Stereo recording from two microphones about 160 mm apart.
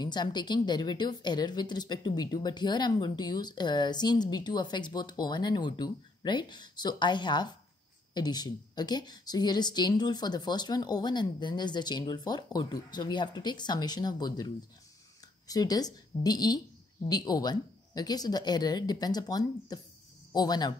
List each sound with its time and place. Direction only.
0.0 s a woman's voice: 25° left (ahead or behind)